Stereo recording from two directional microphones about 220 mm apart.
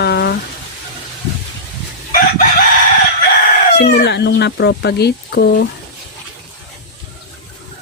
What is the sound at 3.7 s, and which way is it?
Speech, 50° left (ahead or behind).